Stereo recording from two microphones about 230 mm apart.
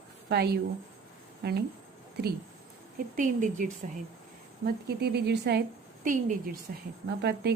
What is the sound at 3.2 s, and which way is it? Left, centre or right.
A woman's voice, right.